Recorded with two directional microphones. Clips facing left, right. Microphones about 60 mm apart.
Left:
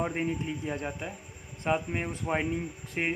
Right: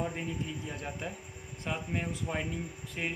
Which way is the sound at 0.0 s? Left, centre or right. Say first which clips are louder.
Left 5 dB; left.